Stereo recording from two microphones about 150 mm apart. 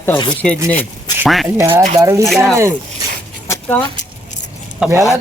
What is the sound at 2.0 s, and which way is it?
Speech, 20° right (ahead or behind).